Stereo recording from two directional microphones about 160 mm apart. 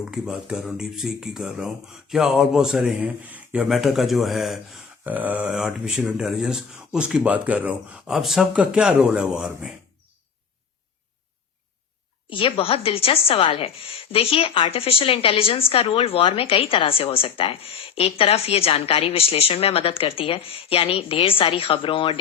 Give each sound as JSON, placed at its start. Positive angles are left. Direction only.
{"t": 0.0, "sound": "speech", "side_deg": -5}
{"t": 12.3, "sound": "a woman's voice", "side_deg": 30}